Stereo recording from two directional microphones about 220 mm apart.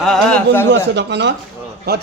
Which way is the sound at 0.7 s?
50° right (ahead or behind).